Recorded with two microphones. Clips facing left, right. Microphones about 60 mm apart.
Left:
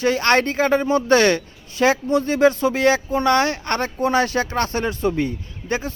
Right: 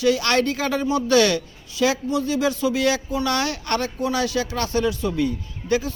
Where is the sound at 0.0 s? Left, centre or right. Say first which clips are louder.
Left 2 dB; left.